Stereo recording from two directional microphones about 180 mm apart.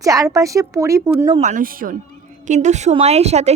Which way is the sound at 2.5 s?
40° right (ahead or behind).